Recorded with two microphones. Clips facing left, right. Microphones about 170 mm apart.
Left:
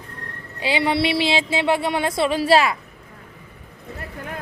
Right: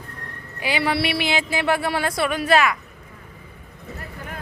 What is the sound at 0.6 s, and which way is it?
Speech, 25° left (ahead or behind).